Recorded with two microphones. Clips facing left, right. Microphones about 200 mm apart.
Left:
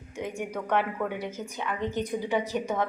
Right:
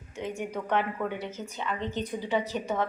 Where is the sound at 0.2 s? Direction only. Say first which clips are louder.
Even; 15° left (ahead or behind).